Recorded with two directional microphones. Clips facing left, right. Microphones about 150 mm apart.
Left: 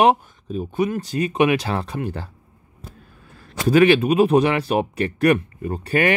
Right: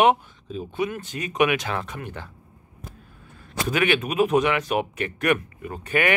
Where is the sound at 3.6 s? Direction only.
35° left (ahead or behind).